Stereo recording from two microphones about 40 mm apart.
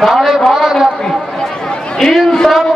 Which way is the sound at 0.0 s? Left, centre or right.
Centre.